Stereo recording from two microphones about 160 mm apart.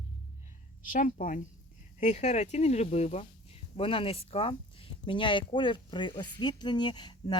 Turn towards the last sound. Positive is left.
turn(degrees=30)  # may be behind; listen again after turning